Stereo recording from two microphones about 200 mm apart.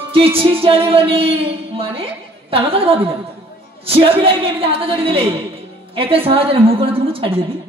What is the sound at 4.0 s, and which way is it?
A woman's voice, 25° right (ahead or behind).